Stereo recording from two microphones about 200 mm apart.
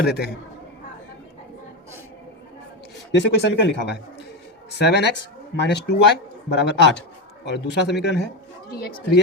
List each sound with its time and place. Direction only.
0.0 s speech: 55° left (ahead or behind)
3.1 s speech: 60° left (ahead or behind)